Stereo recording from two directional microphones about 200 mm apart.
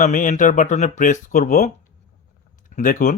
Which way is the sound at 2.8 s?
40° left (ahead or behind).